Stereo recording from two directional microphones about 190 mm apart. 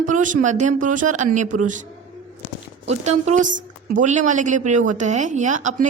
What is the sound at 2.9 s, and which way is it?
A woman's voice, 35° right (ahead or behind).